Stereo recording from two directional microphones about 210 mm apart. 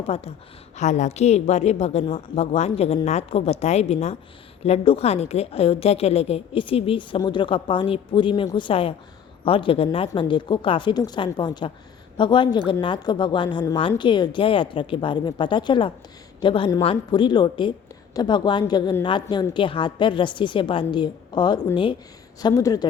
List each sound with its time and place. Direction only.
0.1 s a woman's voice: 30° left (ahead or behind)